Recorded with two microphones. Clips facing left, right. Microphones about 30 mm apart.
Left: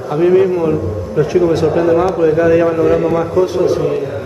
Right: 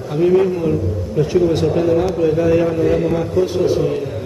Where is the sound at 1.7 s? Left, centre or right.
Centre.